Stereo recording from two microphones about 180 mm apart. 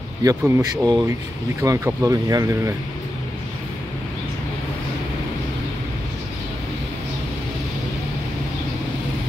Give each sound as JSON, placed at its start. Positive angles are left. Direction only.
{"t": 0.2, "sound": "speech", "side_deg": -20}